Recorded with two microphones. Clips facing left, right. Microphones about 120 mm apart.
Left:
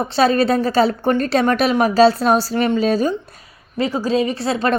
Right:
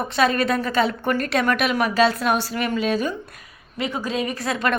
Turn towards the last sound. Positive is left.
turn(degrees=30)  # may be behind; listen again after turning